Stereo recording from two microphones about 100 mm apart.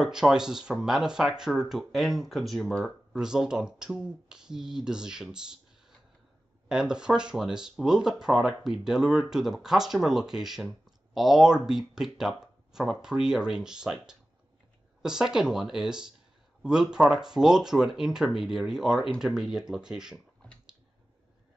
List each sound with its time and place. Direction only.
0.0 s speech: 5° right (ahead or behind)
3.2 s speech: 5° right (ahead or behind)